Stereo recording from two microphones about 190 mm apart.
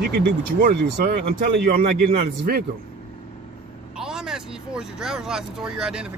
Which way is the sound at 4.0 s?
5° right (ahead or behind).